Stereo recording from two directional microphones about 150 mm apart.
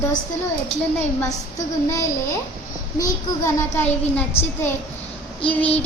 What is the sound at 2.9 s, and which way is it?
A child's voice, 20° left (ahead or behind).